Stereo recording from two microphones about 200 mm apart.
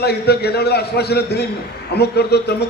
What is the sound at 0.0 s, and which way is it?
A man's voice, 55° left (ahead or behind).